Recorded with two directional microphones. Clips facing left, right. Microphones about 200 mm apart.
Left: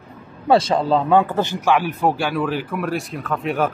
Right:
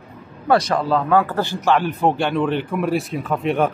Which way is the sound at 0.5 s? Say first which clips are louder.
Left 1 dB; 25° left (ahead or behind).